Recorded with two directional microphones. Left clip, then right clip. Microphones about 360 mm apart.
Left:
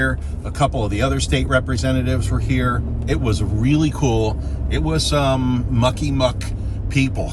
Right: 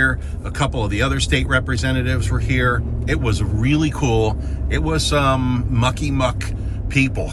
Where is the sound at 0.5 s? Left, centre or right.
Centre.